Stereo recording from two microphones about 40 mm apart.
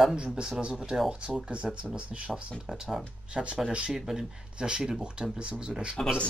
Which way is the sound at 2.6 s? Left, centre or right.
Centre.